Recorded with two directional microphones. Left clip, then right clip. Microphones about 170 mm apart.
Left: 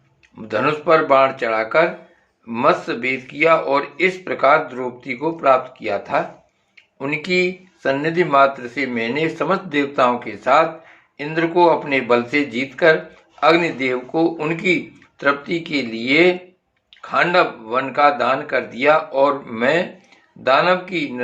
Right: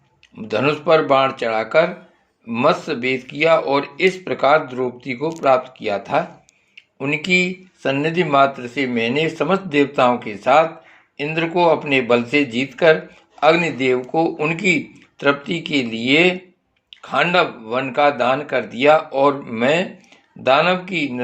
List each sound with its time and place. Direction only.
0.4 s speech: 30° right (ahead or behind)